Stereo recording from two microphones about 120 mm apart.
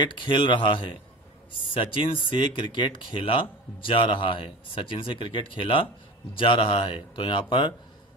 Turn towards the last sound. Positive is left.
turn(degrees=40)  # may be behind; listen again after turning